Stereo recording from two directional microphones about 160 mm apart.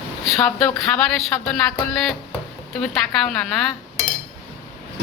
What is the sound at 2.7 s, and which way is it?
Speech, centre (ahead or behind).